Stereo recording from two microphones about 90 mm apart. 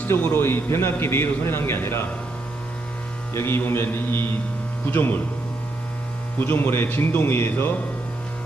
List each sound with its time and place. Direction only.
0.0 s a man's voice: 25° left (ahead or behind)
3.3 s a man's voice: 25° left (ahead or behind)
6.4 s a man's voice: 25° left (ahead or behind)